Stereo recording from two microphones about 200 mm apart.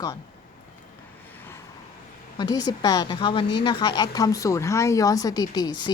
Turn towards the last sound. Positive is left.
turn(degrees=20)  # may be behind; listen again after turning